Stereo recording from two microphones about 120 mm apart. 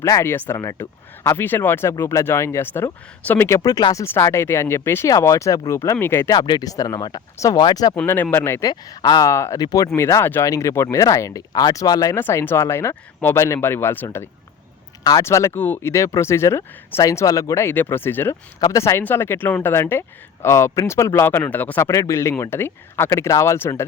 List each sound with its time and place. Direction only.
0.0 s speech: 25° left (ahead or behind)
4.0 s speech: 20° left (ahead or behind)
6.3 s speech: 35° left (ahead or behind)
8.0 s speech: 15° left (ahead or behind)
8.7 s speech: 35° left (ahead or behind); by 14.3 s 20° left (ahead or behind)
15.0 s speech: 30° left (ahead or behind)